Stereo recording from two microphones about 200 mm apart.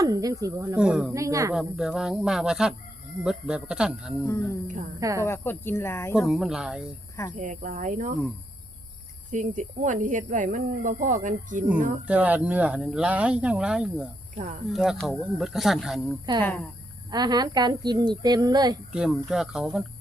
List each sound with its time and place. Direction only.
0.0 s speech: 15° right (ahead or behind)
1.1 s speech: 15° right (ahead or behind)
1.5 s speech: 5° right (ahead or behind)
4.3 s speech: 15° left (ahead or behind)
4.9 s speech: 15° right (ahead or behind)
5.2 s speech: 10° left (ahead or behind)
6.1 s speech: 5° right (ahead or behind)
7.3 s speech: 40° right (ahead or behind)
9.3 s speech: 40° right (ahead or behind)
12.0 s speech: 5° right (ahead or behind)
16.4 s speech: 10° left (ahead or behind)
17.1 s a woman's voice: 20° right (ahead or behind)
18.9 s speech: 5° right (ahead or behind)